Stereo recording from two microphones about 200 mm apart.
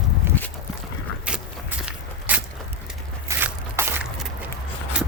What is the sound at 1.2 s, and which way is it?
Walk, 5° right (ahead or behind).